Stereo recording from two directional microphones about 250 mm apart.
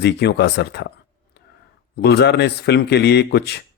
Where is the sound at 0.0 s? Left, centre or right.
Left.